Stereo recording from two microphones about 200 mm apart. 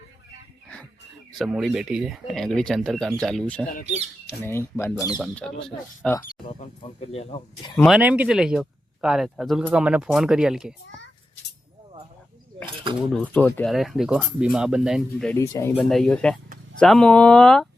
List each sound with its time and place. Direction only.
1.4 s speech: centre (ahead or behind); by 5.2 s 15° left (ahead or behind)
5.2 s speech: 5° left (ahead or behind)
6.5 s speech: 30° left (ahead or behind)
7.8 s speech: centre (ahead or behind)
13.1 s speech: 5° left (ahead or behind)
15.3 s speech: 15° left (ahead or behind)